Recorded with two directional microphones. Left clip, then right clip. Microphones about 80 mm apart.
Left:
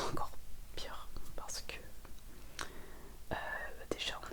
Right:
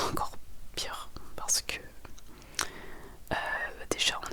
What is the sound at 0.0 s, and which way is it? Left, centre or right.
Whispering, right.